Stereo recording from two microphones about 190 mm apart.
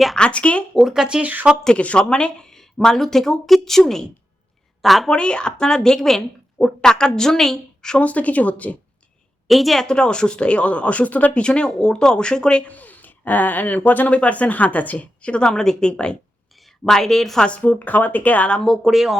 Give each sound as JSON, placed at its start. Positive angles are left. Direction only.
{"t": 0.0, "sound": "speech", "side_deg": 5}
{"t": 1.6, "sound": "speech", "side_deg": 5}